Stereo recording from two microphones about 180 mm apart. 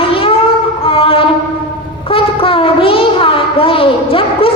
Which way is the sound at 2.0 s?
30° left (ahead or behind).